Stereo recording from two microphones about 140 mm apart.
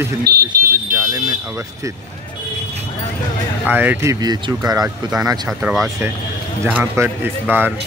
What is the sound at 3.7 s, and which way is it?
Speech, 15° right (ahead or behind).